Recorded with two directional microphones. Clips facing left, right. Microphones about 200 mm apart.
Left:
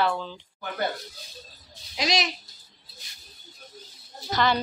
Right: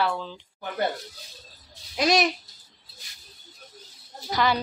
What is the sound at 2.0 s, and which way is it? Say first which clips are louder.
Speech: right 5 dB; 55° right (ahead or behind).